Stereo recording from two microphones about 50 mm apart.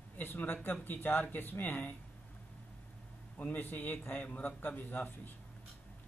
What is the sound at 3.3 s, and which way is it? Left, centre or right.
A man's voice, left.